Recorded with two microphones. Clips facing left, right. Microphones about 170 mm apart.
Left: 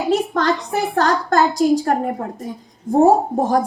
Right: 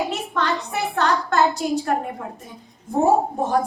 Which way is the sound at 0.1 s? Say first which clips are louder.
Left 7 dB; 35° left (ahead or behind).